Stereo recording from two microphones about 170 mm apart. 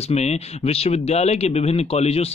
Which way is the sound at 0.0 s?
40° left (ahead or behind).